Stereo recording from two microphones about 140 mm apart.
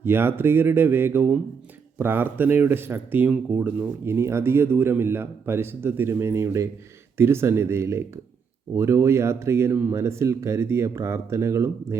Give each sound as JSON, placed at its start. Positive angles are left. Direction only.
{"t": 0.0, "sound": "speech", "side_deg": -15}